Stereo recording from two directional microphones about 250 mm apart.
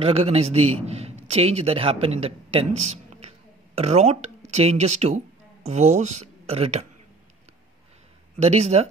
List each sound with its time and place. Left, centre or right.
0.0 s a man's voice: right
8.4 s a man's voice: right